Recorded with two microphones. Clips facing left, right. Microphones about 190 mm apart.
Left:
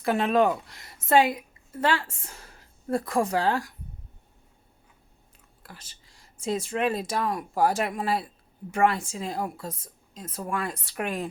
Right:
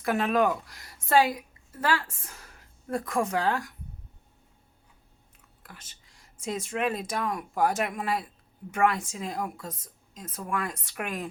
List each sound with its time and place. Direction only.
0.0 s a woman's voice: 30° left (ahead or behind)
5.6 s speech: 35° left (ahead or behind)